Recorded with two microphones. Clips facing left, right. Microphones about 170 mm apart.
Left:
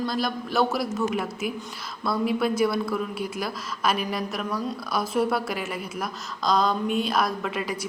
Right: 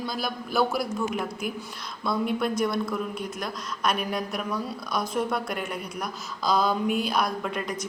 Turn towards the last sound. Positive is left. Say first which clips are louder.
# left 1 dB
turn(degrees=5)  # may be behind; listen again after turning